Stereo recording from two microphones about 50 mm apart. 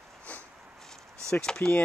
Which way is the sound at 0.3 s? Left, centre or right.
Left.